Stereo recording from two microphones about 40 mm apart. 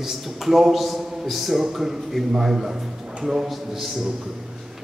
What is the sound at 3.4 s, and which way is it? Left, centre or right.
Speech, centre.